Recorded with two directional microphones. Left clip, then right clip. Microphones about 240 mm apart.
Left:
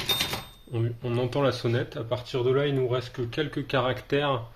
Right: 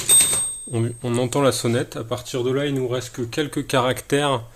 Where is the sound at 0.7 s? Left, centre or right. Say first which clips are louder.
Right 5 dB; right.